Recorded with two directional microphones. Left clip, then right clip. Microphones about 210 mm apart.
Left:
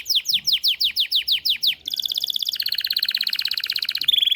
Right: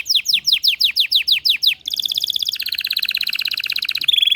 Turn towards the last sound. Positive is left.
turn(degrees=-10)  # may be behind; listen again after turning